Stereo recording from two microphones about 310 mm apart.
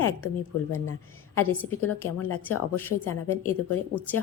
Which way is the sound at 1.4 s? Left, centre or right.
Left.